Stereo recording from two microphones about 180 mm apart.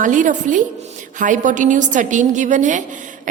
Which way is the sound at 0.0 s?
45° right (ahead or behind).